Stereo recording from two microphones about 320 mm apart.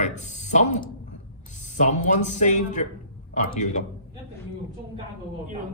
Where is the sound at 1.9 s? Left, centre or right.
Left.